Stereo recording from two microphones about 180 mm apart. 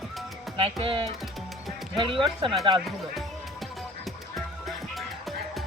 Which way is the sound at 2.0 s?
30° right (ahead or behind).